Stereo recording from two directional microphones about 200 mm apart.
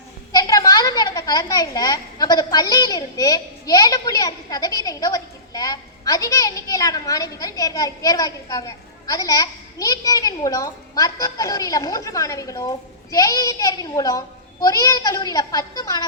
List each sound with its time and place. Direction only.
0.3 s a child's voice: 20° left (ahead or behind)